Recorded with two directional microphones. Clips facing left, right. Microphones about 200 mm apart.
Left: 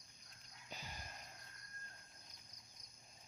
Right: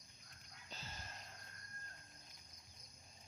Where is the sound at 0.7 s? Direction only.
15° left (ahead or behind).